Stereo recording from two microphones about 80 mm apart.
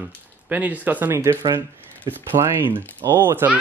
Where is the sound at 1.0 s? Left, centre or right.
Right.